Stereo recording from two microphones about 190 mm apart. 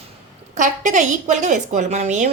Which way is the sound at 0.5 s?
40° right (ahead or behind).